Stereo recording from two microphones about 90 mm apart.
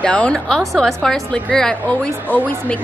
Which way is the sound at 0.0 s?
15° left (ahead or behind).